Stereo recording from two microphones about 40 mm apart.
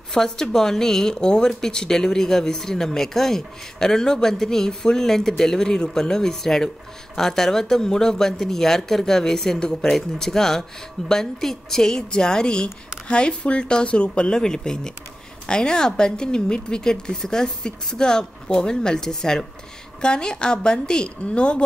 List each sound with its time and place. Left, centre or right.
0.1 s a woman's voice: centre